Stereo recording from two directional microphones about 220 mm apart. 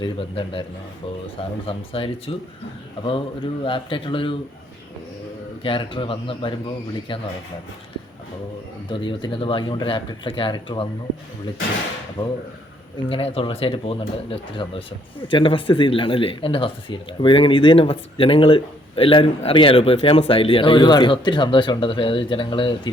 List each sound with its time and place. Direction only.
0.0 s speech: 25° left (ahead or behind)
1.6 s speech: 25° left (ahead or behind)
5.6 s speech: 25° left (ahead or behind)
8.9 s speech: 20° left (ahead or behind)
13.1 s speech: 25° left (ahead or behind)